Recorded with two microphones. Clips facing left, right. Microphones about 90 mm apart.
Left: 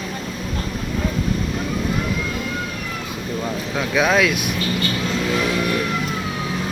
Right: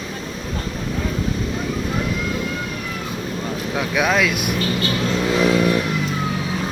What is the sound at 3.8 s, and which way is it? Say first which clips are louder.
Speech: left 1 dB; 5° right (ahead or behind).